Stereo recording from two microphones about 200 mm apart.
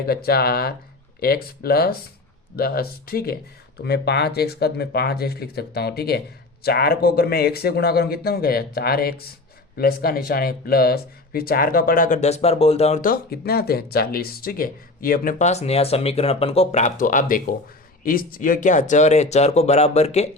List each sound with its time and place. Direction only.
0.0 s speech: 50° left (ahead or behind); by 20.3 s 30° left (ahead or behind)